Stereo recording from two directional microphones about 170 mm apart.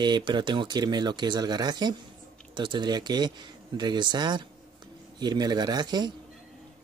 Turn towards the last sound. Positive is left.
turn(degrees=-25)  # may be behind; listen again after turning